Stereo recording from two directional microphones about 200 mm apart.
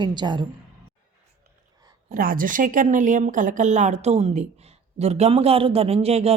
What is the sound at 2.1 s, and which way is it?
Speech, 45° right (ahead or behind).